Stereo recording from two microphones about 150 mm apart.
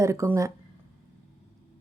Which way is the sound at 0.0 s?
20° right (ahead or behind).